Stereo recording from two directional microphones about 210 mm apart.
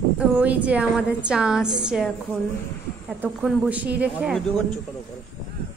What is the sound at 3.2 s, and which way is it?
Speech, 5° right (ahead or behind).